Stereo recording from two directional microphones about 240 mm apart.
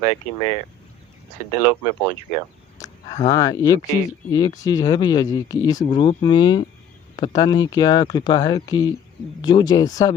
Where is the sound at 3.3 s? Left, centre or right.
Centre.